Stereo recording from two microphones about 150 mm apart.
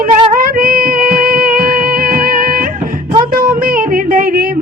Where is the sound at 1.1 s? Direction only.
70° right (ahead or behind).